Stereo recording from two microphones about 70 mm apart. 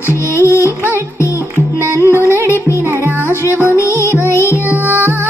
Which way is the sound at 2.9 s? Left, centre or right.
Right.